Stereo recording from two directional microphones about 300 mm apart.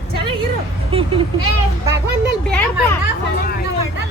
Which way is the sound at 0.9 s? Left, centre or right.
Centre.